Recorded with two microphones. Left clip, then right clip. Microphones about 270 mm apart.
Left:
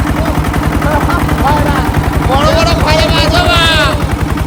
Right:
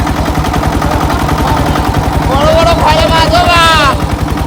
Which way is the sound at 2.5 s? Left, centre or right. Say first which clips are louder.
Right 3 dB; centre.